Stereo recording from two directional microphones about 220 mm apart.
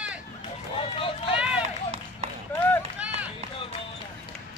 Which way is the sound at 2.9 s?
5° right (ahead or behind).